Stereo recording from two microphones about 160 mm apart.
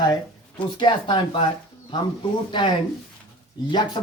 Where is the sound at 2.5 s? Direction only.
30° left (ahead or behind).